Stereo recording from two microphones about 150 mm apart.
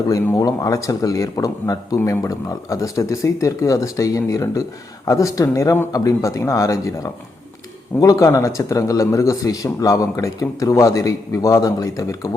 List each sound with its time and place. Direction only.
0.1 s speech: 25° left (ahead or behind)